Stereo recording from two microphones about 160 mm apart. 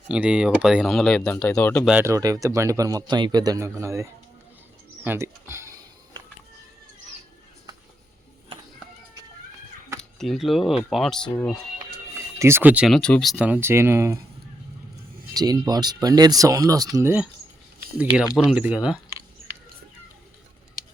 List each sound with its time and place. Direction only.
0.1 s speech: 5° right (ahead or behind)
1.9 s speech: 15° right (ahead or behind)
10.0 s speech: centre (ahead or behind)
12.4 s speech: 15° right (ahead or behind)
13.0 s speech: 5° left (ahead or behind)
13.3 s speech: 10° right (ahead or behind)
15.3 s speech: 25° right (ahead or behind); by 18.9 s 5° right (ahead or behind)